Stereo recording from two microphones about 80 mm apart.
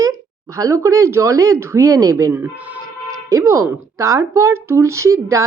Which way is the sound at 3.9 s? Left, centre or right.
Right.